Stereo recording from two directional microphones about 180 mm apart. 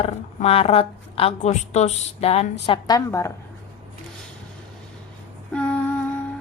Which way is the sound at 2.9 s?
15° left (ahead or behind).